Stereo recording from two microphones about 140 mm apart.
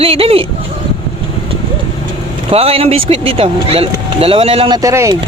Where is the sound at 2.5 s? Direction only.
45° right (ahead or behind).